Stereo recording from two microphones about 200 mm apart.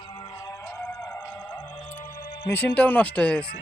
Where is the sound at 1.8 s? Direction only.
35° left (ahead or behind).